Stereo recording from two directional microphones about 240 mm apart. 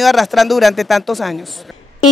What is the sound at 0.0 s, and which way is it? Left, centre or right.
Speech, centre.